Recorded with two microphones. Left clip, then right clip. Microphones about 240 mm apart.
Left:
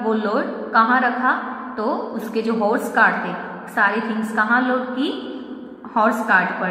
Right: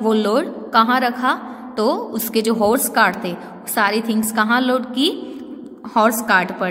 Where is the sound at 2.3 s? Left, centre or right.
Right.